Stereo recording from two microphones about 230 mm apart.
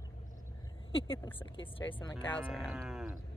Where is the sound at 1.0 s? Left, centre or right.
Left.